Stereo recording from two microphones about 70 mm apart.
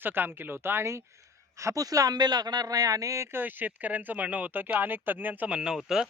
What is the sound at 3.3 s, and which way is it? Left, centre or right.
Speech, right.